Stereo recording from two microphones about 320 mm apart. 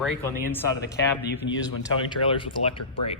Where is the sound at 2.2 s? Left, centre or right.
Centre.